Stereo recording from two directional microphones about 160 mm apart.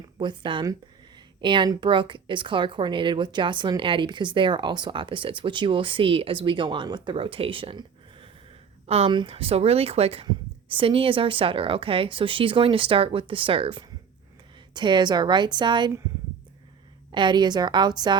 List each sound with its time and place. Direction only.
0.2 s a woman's voice: 30° right (ahead or behind)
17.1 s a woman's voice: 30° right (ahead or behind)